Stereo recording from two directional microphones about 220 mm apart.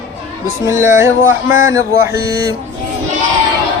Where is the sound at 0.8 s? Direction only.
10° right (ahead or behind).